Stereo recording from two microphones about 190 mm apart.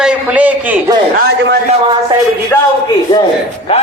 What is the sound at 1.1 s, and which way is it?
Speech, 60° right (ahead or behind).